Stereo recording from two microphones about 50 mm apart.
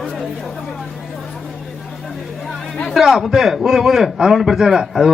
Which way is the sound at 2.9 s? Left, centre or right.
Centre.